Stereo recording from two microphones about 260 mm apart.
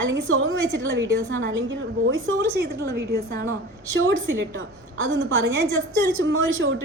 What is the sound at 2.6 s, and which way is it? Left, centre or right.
A woman's voice, right.